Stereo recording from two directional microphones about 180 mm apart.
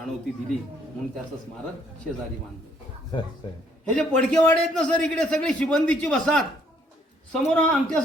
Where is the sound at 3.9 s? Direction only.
5° left (ahead or behind).